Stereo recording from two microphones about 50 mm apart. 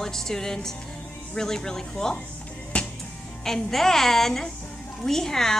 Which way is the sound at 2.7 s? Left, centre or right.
Left.